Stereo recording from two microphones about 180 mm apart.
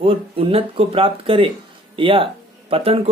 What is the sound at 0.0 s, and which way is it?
Speech, 30° right (ahead or behind).